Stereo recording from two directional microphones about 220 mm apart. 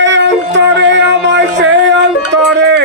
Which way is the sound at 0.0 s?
55° right (ahead or behind).